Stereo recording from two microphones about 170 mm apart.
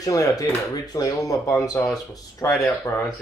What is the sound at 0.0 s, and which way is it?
Speech, 20° left (ahead or behind).